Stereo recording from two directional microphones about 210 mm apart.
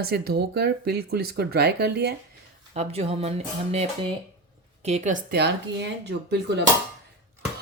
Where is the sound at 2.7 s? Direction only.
30° right (ahead or behind).